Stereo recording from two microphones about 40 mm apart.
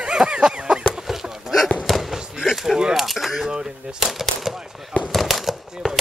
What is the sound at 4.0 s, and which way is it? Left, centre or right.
Speech, centre.